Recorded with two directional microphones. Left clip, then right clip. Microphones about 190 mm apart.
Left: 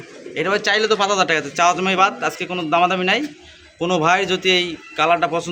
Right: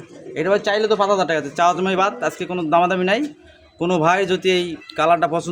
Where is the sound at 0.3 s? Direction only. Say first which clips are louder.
Even; 40° right (ahead or behind).